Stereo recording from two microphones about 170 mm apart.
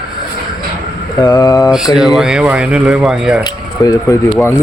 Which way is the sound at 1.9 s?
Centre (ahead or behind).